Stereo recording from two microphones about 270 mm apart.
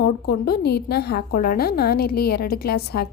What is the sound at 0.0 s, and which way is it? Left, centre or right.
A woman's voice, left.